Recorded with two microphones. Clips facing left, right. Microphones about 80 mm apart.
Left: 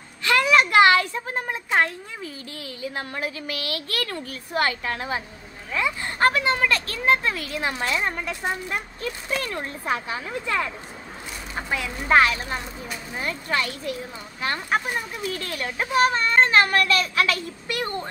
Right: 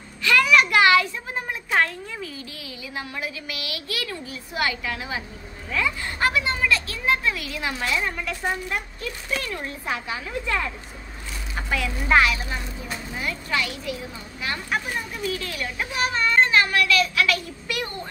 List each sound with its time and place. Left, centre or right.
0.2 s a sound: left
1.7 s speech: left
5.7 s speech: left
11.5 s speech: left